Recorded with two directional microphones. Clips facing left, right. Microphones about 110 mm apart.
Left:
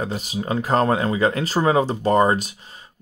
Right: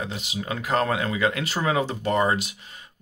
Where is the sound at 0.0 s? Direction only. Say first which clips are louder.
Left 5 dB; 40° left (ahead or behind).